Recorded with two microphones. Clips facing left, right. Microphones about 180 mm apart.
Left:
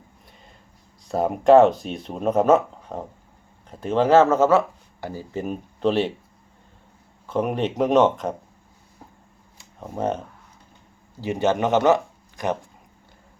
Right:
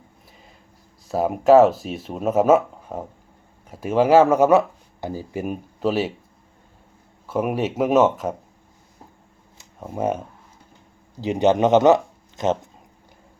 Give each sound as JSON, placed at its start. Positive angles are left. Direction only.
{"t": 1.0, "sound": "speech", "side_deg": -5}
{"t": 7.3, "sound": "speech", "side_deg": -10}
{"t": 9.8, "sound": "speech", "side_deg": -5}